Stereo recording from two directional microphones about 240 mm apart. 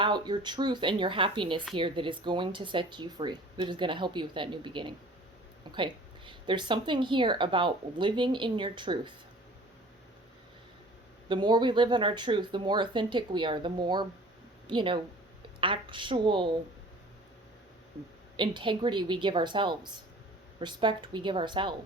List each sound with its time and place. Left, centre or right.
0.0 s a woman's voice: centre
11.3 s a woman's voice: centre
18.3 s a woman's voice: centre